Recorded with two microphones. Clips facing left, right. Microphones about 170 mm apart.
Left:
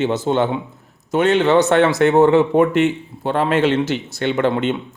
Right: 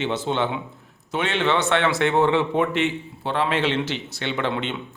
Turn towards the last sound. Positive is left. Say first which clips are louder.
# left 8 dB
turn(degrees=45)  # may be behind; listen again after turning